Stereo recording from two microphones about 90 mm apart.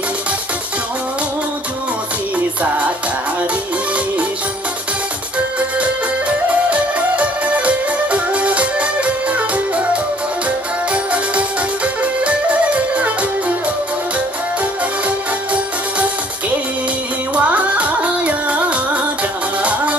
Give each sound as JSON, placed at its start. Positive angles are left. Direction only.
{"t": 2.3, "sound": "music", "side_deg": -15}
{"t": 6.5, "sound": "music", "side_deg": -15}
{"t": 10.9, "sound": "music", "side_deg": -15}
{"t": 17.4, "sound": "music", "side_deg": -15}